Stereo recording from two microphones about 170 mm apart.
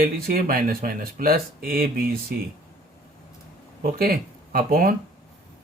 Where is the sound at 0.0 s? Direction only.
60° right (ahead or behind).